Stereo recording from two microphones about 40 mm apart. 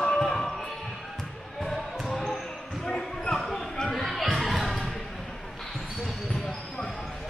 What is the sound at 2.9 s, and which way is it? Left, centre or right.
Basketball bounce, centre.